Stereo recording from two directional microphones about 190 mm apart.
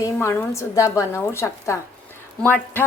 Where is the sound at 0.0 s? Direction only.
15° left (ahead or behind).